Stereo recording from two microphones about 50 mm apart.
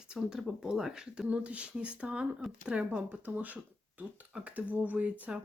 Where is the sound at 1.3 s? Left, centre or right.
Right.